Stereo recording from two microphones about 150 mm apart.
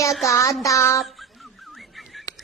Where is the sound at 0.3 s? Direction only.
20° left (ahead or behind).